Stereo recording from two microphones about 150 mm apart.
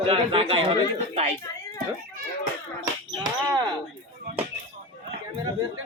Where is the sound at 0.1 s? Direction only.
40° right (ahead or behind).